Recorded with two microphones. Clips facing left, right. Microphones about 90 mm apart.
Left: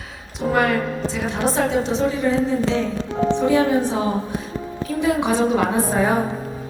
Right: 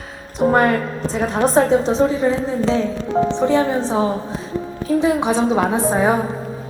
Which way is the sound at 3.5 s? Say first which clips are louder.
Right 1 dB; 30° right (ahead or behind).